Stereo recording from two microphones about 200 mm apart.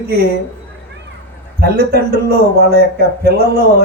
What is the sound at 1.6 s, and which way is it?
Speech, 50° right (ahead or behind).